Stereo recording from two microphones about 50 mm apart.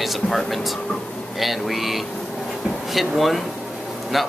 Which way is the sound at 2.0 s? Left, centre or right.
Centre.